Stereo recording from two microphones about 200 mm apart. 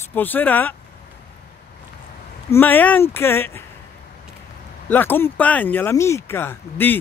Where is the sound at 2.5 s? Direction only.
10° left (ahead or behind).